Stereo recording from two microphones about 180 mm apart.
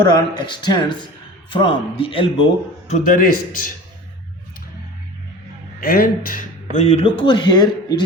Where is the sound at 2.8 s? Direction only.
50° left (ahead or behind).